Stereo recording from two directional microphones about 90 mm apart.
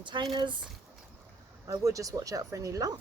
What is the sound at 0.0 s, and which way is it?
Speech, 60° right (ahead or behind).